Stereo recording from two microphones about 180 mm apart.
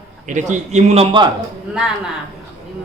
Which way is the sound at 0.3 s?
45° right (ahead or behind).